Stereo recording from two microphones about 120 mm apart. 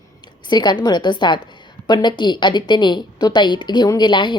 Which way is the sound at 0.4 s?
40° left (ahead or behind).